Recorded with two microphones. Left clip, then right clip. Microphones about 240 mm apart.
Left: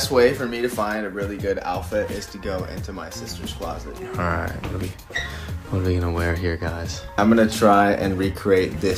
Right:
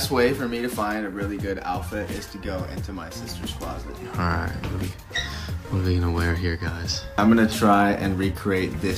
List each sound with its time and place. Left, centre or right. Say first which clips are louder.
0.0 s speech: left 4 dB; centre
4.2 s speech: left 2 dB; centre
5.8 s speech: left 2 dB; centre